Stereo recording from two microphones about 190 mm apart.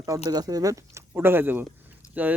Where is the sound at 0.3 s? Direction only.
20° right (ahead or behind).